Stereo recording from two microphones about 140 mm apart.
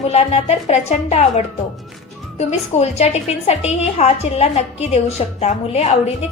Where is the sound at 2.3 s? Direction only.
50° left (ahead or behind).